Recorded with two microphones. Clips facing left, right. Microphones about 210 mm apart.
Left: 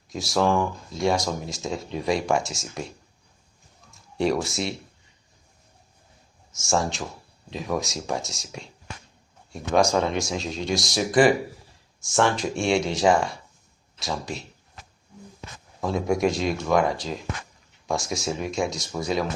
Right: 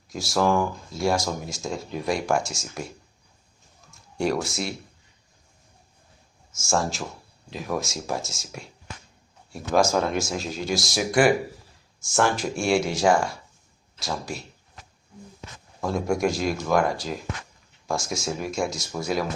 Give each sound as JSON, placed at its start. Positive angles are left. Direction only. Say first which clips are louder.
{"t": 0.1, "sound": "speech", "louder": "even", "side_deg": 0}
{"t": 3.9, "sound": "speech", "louder": "left 1 dB", "side_deg": 0}
{"t": 6.5, "sound": "speech", "louder": "left 1 dB", "side_deg": 0}
{"t": 15.8, "sound": "speech", "louder": "left 1 dB", "side_deg": 0}